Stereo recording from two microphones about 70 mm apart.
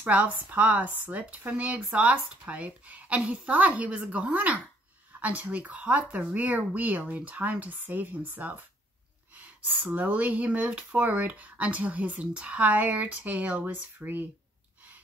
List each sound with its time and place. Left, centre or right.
0.0 s speech: right
9.8 s speech: right